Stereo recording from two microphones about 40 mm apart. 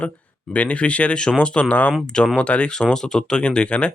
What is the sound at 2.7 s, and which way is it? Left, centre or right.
Speech, centre.